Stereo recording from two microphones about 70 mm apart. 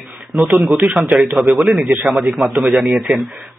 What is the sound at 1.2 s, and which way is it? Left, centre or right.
Speech, centre.